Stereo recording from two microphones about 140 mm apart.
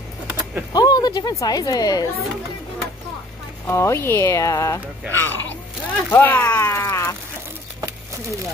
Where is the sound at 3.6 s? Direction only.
20° left (ahead or behind).